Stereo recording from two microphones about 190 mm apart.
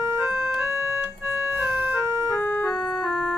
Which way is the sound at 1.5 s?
10° right (ahead or behind).